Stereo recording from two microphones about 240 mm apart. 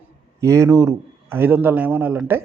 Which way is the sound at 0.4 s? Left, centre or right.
Centre.